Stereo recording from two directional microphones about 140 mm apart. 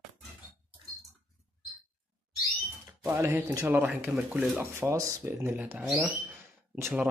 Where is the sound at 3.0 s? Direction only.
15° right (ahead or behind).